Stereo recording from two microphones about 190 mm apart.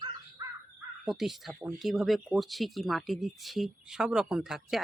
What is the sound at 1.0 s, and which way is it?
Speech, centre (ahead or behind).